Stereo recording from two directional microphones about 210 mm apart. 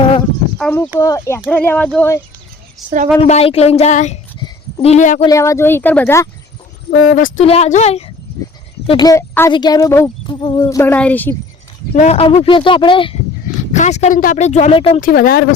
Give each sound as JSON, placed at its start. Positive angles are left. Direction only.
{"t": 0.6, "sound": "a woman's voice", "side_deg": 10}
{"t": 2.8, "sound": "a woman's voice", "side_deg": -5}
{"t": 3.2, "sound": "speech", "side_deg": 30}
{"t": 4.4, "sound": "a sound", "side_deg": 25}
{"t": 5.2, "sound": "a woman's voice", "side_deg": 15}
{"t": 7.0, "sound": "speech", "side_deg": 40}
{"t": 8.9, "sound": "a woman's voice", "side_deg": 20}
{"t": 11.9, "sound": "speech", "side_deg": 30}
{"t": 15.0, "sound": "speech", "side_deg": 45}